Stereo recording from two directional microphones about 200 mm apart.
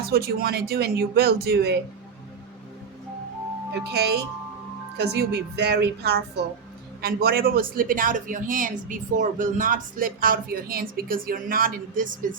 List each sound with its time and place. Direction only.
0.0 s speech: 50° right (ahead or behind)
3.7 s a woman's voice: 55° right (ahead or behind)